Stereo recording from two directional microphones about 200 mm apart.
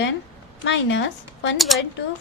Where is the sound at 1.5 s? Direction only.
Centre (ahead or behind).